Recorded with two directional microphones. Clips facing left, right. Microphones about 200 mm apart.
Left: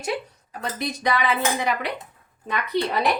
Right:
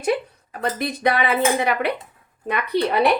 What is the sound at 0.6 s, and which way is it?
Speech, 55° right (ahead or behind).